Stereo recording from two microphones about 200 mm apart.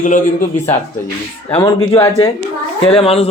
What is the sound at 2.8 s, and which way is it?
Speech, 30° left (ahead or behind).